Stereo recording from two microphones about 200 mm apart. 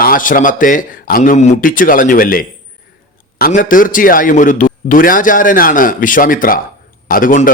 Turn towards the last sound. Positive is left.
turn(degrees=45)  # may be behind; listen again after turning